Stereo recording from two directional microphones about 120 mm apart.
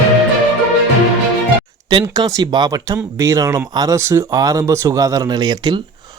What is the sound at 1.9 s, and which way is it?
Speech, 40° right (ahead or behind).